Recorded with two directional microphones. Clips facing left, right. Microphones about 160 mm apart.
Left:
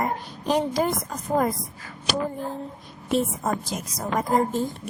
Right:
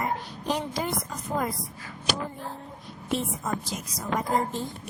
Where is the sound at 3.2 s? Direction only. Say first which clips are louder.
Left 6 dB; 45° left (ahead or behind).